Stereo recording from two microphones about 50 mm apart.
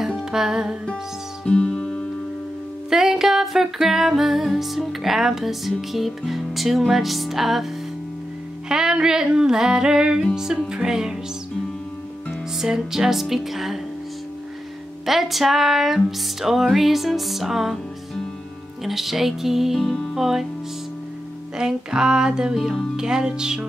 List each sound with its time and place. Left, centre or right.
0.1 s music: centre
1.4 s music: centre
2.9 s music: centre
8.6 s music: centre
12.5 s music: centre
15.0 s music: centre
18.9 s music: centre
19.8 s music: centre
20.2 s music: centre
21.5 s music: centre